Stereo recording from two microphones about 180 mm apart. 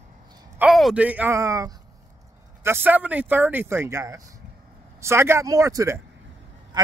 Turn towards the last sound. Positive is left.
turn(degrees=-15)  # may be behind; listen again after turning